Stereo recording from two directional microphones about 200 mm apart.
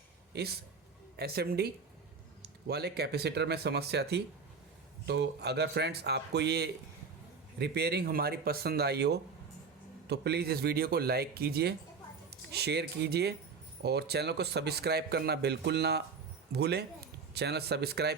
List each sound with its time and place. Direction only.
0.3 s a man's voice: 55° right (ahead or behind)